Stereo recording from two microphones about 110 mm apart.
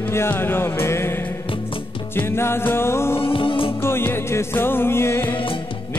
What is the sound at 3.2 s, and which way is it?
Music, 55° left (ahead or behind).